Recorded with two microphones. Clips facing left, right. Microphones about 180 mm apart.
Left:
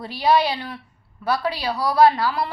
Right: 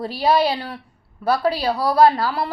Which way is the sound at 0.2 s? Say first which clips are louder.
Right 1 dB; 30° right (ahead or behind).